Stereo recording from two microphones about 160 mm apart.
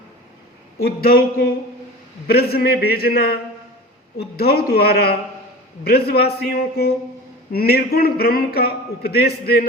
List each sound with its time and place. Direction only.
0.8 s a man's voice: 70° left (ahead or behind)